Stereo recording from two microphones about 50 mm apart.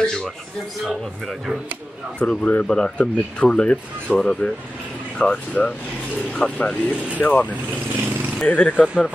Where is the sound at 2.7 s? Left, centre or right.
Centre.